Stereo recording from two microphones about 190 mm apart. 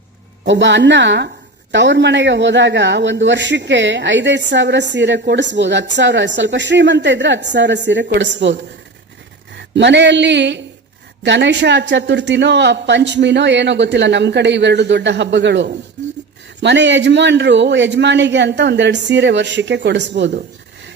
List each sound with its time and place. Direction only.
0.4 s a man's voice: 70° right (ahead or behind)
9.7 s a man's voice: 70° right (ahead or behind)